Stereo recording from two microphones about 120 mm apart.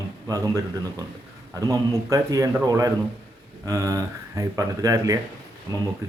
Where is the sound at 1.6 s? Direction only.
30° right (ahead or behind).